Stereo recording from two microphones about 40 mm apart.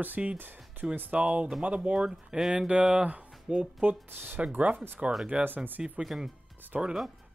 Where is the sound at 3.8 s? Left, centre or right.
Right.